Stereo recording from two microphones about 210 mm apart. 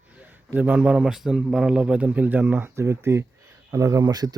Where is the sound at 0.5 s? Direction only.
10° right (ahead or behind).